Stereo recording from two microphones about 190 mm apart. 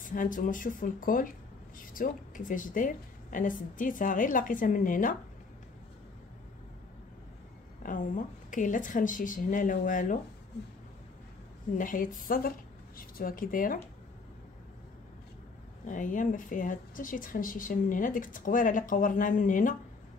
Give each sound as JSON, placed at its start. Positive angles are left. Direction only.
{"t": 0.0, "sound": "speech", "side_deg": 45}
{"t": 7.8, "sound": "speech", "side_deg": 45}
{"t": 11.7, "sound": "speech", "side_deg": 45}
{"t": 15.9, "sound": "speech", "side_deg": 40}